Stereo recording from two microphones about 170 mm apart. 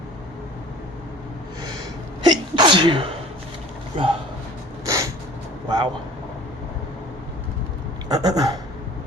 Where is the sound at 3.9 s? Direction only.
30° right (ahead or behind).